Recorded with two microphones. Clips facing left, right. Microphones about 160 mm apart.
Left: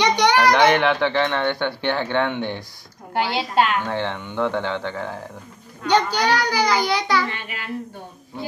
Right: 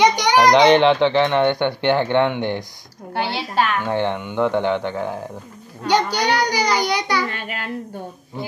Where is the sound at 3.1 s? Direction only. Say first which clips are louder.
Left 1 dB; 15° left (ahead or behind).